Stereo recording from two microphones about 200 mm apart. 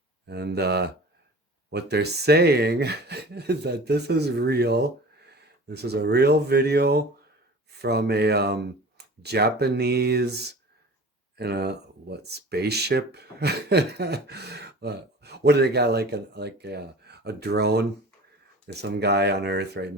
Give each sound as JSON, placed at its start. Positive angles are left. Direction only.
{"t": 0.3, "sound": "speech", "side_deg": -55}